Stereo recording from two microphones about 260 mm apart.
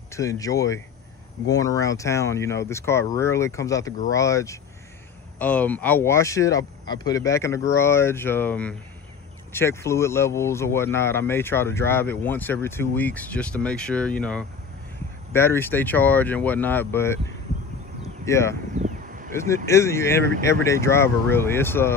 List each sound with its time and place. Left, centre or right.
0.1 s speech: centre
18.2 s speech: centre
18.8 s a sound: right
19.5 s speech: centre